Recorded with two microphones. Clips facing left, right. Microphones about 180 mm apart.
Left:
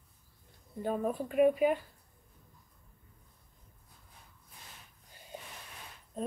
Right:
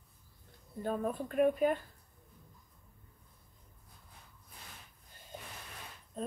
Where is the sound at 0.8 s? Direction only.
10° left (ahead or behind).